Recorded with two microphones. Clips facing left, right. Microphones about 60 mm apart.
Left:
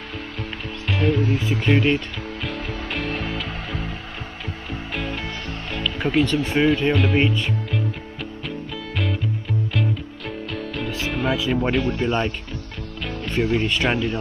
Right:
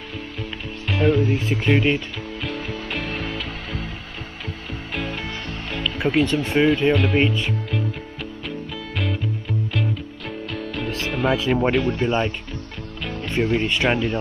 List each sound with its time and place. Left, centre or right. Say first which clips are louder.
0.9 s speech: right 3 dB; centre
1.3 s speech: even; right
1.8 s speech: left 1 dB; centre
2.4 s music: right 1 dB; centre
4.9 s music: right 1 dB; centre
5.7 s speech: right 1 dB; centre
10.5 s music: right 1 dB; centre
11.5 s speech: right 2 dB; centre
11.9 s speech: right 1 dB; centre
13.6 s speech: right 1 dB; centre